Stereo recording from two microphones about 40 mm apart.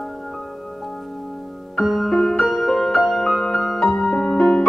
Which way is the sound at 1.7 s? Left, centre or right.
Centre.